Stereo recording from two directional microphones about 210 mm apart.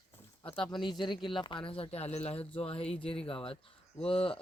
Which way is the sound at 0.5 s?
25° left (ahead or behind).